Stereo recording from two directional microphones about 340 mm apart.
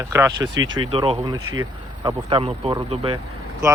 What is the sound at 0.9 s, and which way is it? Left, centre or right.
Speech, centre.